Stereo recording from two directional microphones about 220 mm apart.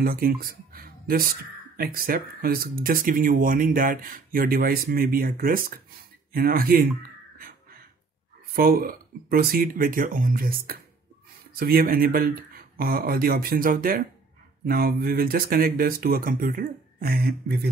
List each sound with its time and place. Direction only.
0.0 s speech: 40° right (ahead or behind)
8.5 s speech: 40° right (ahead or behind)